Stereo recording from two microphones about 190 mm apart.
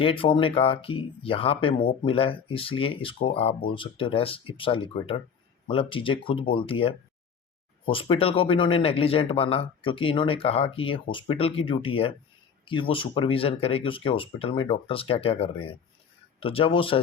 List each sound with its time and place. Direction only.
0.0 s speech: 30° left (ahead or behind)